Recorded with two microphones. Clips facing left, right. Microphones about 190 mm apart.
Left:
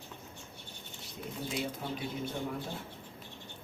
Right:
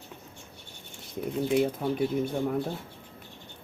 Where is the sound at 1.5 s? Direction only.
55° right (ahead or behind).